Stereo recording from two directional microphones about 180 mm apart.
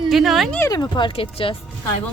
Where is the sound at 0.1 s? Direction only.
Centre (ahead or behind).